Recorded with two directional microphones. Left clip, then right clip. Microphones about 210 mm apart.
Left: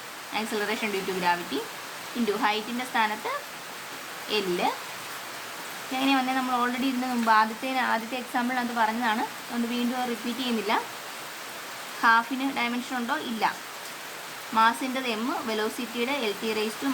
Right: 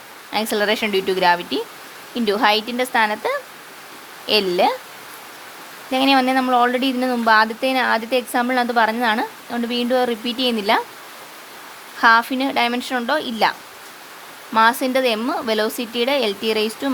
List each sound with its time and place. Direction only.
0.3 s speech: 45° right (ahead or behind)
5.9 s speech: 45° right (ahead or behind)
12.0 s speech: 45° right (ahead or behind)
14.5 s speech: 45° right (ahead or behind)